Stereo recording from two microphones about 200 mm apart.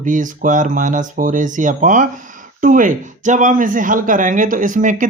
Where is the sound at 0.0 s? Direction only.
40° right (ahead or behind).